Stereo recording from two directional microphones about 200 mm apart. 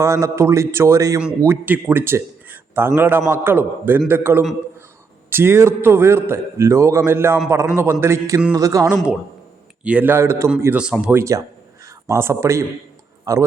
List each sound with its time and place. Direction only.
0.0 s a man's voice: 15° right (ahead or behind)